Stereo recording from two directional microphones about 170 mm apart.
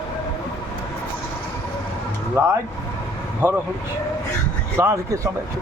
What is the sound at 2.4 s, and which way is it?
Speech, 15° right (ahead or behind).